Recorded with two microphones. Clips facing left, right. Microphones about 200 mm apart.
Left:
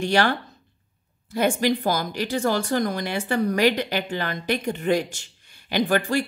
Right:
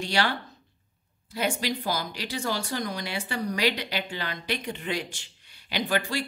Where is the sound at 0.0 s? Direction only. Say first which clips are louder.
Left 6 dB; 50° left (ahead or behind).